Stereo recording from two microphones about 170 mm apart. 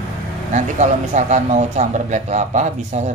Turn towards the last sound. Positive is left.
turn(degrees=-45)  # may be behind; listen again after turning